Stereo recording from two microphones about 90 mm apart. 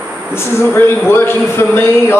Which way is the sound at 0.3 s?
25° left (ahead or behind).